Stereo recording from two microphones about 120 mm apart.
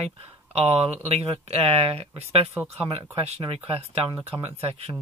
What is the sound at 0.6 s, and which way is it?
Speech, 55° right (ahead or behind).